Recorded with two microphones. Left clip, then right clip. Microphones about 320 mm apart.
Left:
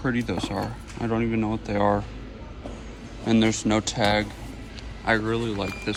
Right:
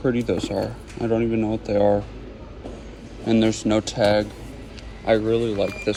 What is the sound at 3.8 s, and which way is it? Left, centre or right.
Speech, left.